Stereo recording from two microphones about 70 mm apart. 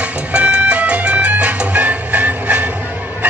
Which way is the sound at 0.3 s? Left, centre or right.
Centre.